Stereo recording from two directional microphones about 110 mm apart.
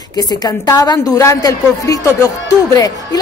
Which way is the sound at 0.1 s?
35° left (ahead or behind).